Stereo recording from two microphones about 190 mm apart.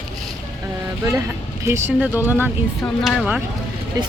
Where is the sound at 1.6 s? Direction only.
10° right (ahead or behind).